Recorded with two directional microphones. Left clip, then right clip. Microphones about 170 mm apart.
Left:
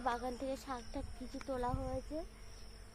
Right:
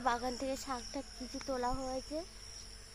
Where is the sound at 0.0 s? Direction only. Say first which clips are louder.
Right 4 dB; 40° right (ahead or behind).